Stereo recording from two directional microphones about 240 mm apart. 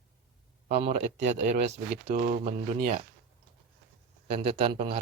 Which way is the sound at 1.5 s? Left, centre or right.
Right.